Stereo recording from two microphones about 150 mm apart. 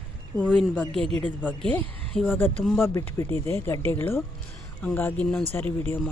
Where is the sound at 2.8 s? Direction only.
20° left (ahead or behind).